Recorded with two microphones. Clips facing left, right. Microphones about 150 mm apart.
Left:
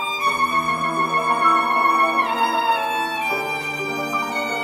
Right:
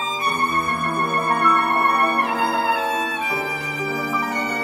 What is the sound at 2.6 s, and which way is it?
Violin, 25° left (ahead or behind).